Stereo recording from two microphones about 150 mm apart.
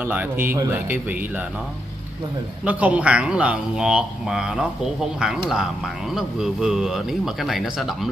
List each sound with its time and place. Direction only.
0.0 s speech: 10° right (ahead or behind)
2.6 s speech: 10° right (ahead or behind)